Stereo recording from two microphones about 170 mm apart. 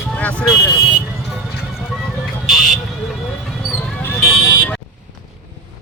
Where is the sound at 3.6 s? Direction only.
5° left (ahead or behind).